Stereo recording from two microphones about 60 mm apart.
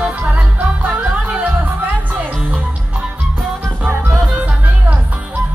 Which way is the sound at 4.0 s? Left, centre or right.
Right.